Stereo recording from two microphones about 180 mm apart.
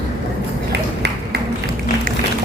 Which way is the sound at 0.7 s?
70° right (ahead or behind).